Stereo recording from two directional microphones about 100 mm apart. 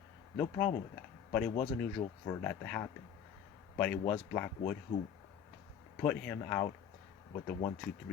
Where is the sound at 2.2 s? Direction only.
20° left (ahead or behind).